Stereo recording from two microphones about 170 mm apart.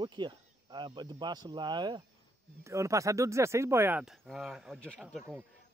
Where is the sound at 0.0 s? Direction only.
25° right (ahead or behind).